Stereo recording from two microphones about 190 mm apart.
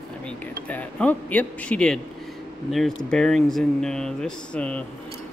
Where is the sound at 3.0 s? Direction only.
5° left (ahead or behind).